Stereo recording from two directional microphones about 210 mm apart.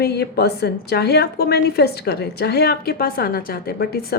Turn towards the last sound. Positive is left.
turn(degrees=45)  # may be behind; listen again after turning